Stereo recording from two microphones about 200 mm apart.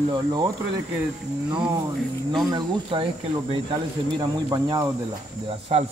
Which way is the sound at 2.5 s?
25° right (ahead or behind).